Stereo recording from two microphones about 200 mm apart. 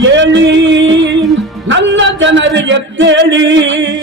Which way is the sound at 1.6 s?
65° right (ahead or behind).